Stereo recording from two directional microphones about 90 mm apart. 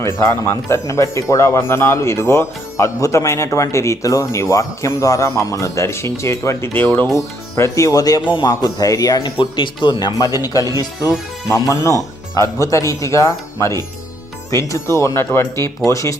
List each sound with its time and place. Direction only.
0.0 s speech: 35° left (ahead or behind)
6.8 s speech: 20° left (ahead or behind)
7.2 s speech: 35° left (ahead or behind)
8.3 s speech: 55° left (ahead or behind)
9.4 s speech: 65° left (ahead or behind); by 10.7 s 45° left (ahead or behind)
11.7 s speech: 35° left (ahead or behind)